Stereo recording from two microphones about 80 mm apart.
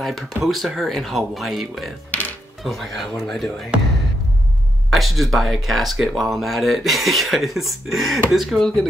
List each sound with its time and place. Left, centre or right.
0.4 s speech: centre
2.0 s music: left
2.6 s speech: centre
4.9 s speech: centre